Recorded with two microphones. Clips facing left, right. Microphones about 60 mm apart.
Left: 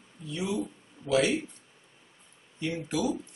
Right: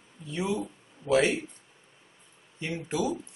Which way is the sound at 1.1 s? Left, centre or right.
Centre.